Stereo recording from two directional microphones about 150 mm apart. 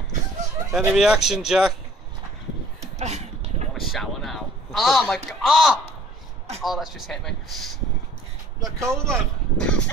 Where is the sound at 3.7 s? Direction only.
Centre (ahead or behind).